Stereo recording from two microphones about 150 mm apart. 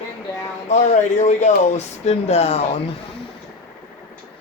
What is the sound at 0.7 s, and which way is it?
Speech, 50° left (ahead or behind).